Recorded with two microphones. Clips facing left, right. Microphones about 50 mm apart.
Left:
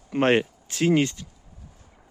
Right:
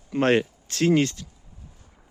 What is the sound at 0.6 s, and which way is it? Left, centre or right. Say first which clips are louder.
Speech: right 1 dB; centre.